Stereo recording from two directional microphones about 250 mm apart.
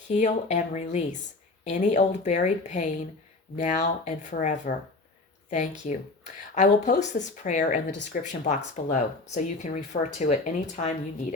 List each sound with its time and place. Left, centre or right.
0.1 s speech: left
6.5 s speech: left